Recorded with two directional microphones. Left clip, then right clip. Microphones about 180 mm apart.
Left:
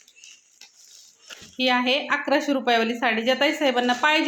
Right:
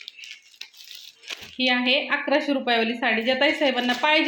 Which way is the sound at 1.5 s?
5° left (ahead or behind).